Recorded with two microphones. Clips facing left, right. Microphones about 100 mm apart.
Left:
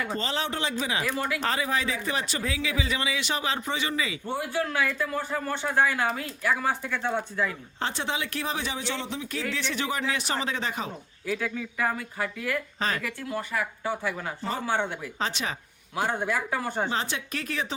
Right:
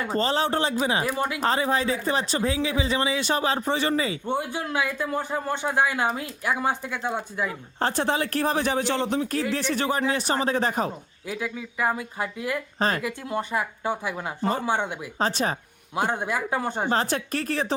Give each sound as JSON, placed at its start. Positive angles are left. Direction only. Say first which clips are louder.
{"t": 0.0, "sound": "speech", "louder": "right 6 dB", "side_deg": -40}
{"t": 1.1, "sound": "speech", "louder": "right 2 dB", "side_deg": -20}
{"t": 1.4, "sound": "speech", "louder": "right 4 dB", "side_deg": -35}
{"t": 4.3, "sound": "speech", "louder": "right 1 dB", "side_deg": -20}
{"t": 7.8, "sound": "speech", "louder": "right 6 dB", "side_deg": -45}
{"t": 11.3, "sound": "speech", "louder": "left 1 dB", "side_deg": -10}
{"t": 15.2, "sound": "speech", "louder": "right 6 dB", "side_deg": -40}
{"t": 16.0, "sound": "speech", "louder": "right 2 dB", "side_deg": -20}
{"t": 16.9, "sound": "speech", "louder": "right 6 dB", "side_deg": -45}